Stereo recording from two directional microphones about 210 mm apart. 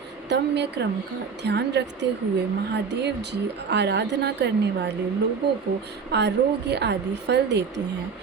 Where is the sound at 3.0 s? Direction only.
55° right (ahead or behind).